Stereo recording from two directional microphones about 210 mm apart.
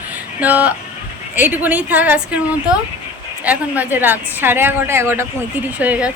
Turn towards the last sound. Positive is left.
turn(degrees=-5)  # may be behind; listen again after turning